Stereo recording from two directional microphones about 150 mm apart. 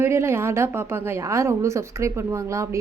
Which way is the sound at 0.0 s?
15° right (ahead or behind).